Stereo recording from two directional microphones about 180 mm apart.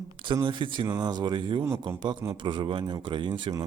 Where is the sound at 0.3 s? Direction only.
25° right (ahead or behind).